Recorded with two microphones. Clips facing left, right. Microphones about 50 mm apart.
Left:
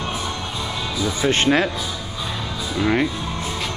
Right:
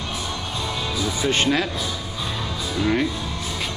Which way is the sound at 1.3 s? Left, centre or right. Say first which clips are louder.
Left 3 dB; left.